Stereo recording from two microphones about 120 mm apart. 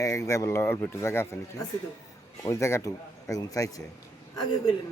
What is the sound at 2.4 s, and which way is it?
Speech, 25° left (ahead or behind).